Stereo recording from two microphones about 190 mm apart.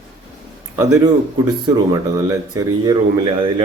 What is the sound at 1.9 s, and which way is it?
Speech, 20° right (ahead or behind).